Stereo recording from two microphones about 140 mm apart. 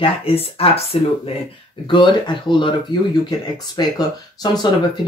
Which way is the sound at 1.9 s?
35° left (ahead or behind).